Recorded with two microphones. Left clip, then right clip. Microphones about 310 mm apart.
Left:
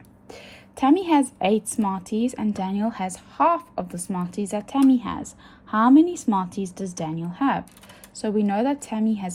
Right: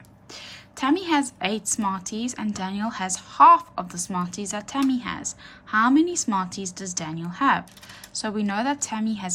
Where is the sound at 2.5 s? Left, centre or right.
Centre.